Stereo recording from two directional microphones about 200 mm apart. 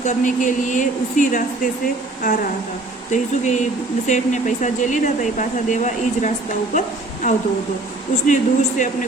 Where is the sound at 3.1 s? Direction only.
35° left (ahead or behind).